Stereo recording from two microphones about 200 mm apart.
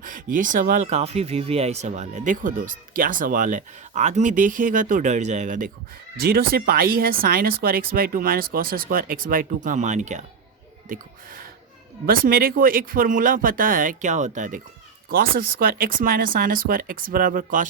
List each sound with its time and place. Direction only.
0.0 s speech: 40° right (ahead or behind)